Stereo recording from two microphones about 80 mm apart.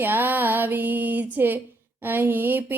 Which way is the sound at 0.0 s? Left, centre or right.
Right.